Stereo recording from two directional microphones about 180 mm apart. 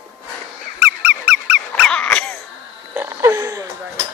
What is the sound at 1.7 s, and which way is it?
Dog, 5° left (ahead or behind).